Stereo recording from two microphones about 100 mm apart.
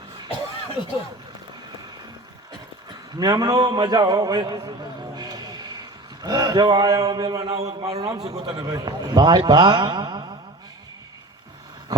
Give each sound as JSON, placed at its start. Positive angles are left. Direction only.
{"t": 3.2, "sound": "a man's voice", "side_deg": -40}
{"t": 7.5, "sound": "a man's voice", "side_deg": -90}
{"t": 8.4, "sound": "a man's voice", "side_deg": -60}
{"t": 8.7, "sound": "a man's voice", "side_deg": -40}
{"t": 11.9, "sound": "a sound", "side_deg": -40}